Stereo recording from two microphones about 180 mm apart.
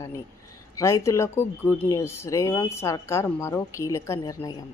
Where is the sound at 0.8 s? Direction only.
15° left (ahead or behind).